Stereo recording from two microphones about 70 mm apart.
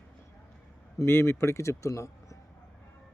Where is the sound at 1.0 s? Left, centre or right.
Left.